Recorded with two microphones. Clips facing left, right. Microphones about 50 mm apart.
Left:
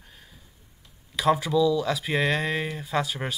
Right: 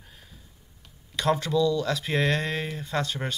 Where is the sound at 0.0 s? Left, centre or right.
Centre.